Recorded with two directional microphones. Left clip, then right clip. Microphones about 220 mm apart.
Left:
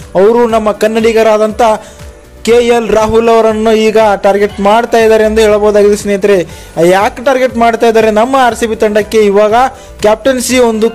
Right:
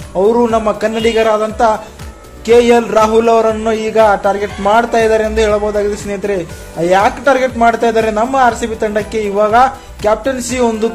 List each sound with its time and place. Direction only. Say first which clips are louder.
0.1 s a man's voice: left 4 dB; 30° left (ahead or behind)